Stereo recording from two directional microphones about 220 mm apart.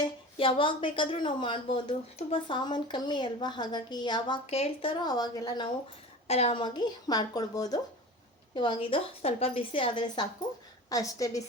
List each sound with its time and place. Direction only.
0.3 s speech: 25° left (ahead or behind)
6.2 s a woman's voice: 30° left (ahead or behind)